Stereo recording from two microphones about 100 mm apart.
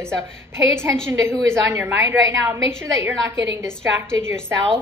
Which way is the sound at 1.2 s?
30° right (ahead or behind).